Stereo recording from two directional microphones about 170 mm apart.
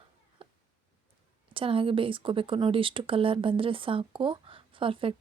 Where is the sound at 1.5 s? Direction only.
30° right (ahead or behind).